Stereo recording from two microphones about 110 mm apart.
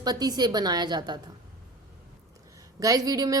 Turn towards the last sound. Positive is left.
turn(degrees=-35)  # may be behind; listen again after turning